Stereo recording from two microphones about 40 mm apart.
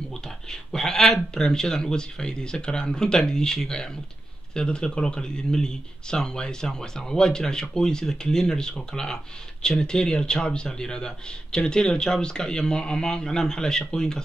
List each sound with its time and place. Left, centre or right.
0.1 s speech: centre